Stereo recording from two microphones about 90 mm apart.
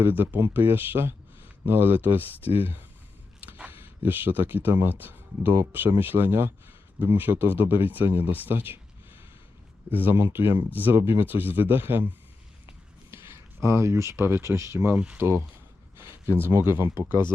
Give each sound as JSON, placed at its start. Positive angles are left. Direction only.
{"t": 0.0, "sound": "speech", "side_deg": -20}
{"t": 9.9, "sound": "speech", "side_deg": -20}
{"t": 13.6, "sound": "speech", "side_deg": -30}
{"t": 14.9, "sound": "speech", "side_deg": -10}
{"t": 15.2, "sound": "speech", "side_deg": -30}